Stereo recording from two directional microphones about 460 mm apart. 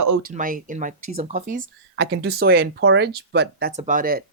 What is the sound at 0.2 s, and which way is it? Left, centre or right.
Speech, centre.